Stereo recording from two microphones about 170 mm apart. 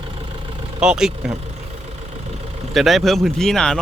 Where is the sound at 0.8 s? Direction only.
5° right (ahead or behind).